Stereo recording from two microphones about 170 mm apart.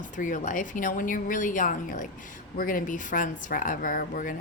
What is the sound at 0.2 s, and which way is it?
Speech, 50° left (ahead or behind).